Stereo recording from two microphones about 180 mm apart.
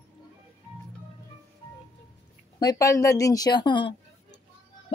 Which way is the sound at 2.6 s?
20° left (ahead or behind).